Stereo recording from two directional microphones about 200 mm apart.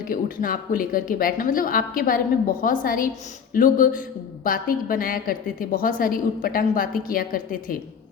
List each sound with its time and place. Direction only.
0.0 s a woman's voice: 45° left (ahead or behind)